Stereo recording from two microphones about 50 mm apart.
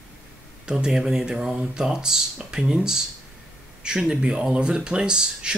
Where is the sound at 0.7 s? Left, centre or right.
Centre.